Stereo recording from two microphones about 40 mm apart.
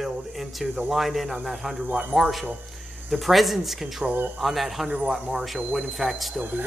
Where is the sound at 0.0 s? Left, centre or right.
Centre.